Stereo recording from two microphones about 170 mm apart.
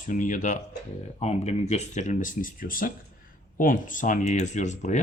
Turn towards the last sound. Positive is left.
turn(degrees=45)  # may be behind; listen again after turning